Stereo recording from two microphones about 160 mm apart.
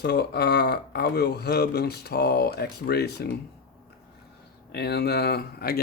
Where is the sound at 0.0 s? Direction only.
85° left.